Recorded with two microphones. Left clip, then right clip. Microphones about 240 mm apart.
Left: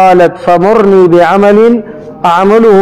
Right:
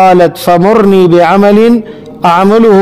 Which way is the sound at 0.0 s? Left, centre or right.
Right.